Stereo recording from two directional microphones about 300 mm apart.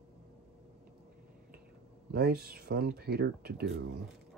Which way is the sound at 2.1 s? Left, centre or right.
Right.